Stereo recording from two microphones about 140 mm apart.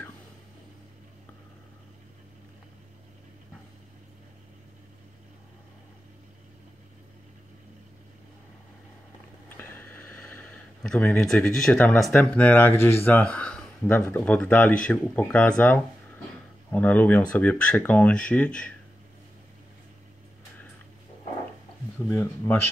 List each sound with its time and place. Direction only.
9.5 s speech: 15° left (ahead or behind)
22.1 s speech: 15° left (ahead or behind)